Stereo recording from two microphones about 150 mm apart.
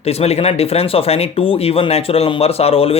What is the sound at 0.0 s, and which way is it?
Speech, 45° left (ahead or behind).